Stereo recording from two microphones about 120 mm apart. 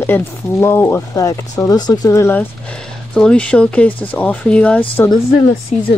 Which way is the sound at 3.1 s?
5° left (ahead or behind).